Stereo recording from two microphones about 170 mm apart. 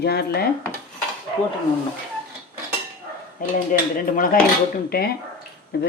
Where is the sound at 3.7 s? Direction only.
50° left (ahead or behind).